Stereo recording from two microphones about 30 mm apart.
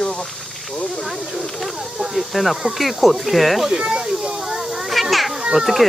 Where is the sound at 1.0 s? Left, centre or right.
Centre.